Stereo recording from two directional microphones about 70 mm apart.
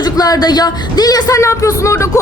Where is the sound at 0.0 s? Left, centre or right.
Left.